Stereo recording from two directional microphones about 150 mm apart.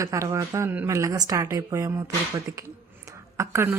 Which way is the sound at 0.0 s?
20° right (ahead or behind).